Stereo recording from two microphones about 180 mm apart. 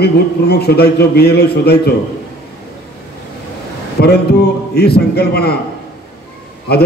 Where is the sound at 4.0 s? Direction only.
65° left (ahead or behind).